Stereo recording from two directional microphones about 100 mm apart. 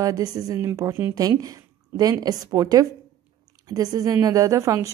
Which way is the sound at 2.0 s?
40° right (ahead or behind).